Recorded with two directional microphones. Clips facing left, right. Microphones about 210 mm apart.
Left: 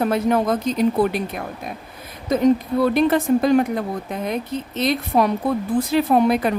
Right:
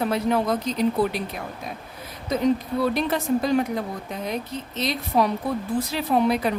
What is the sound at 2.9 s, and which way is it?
A woman's voice, 55° left (ahead or behind).